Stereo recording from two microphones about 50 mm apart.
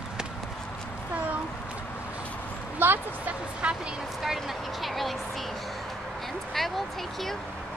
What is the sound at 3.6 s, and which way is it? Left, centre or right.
Speech, right.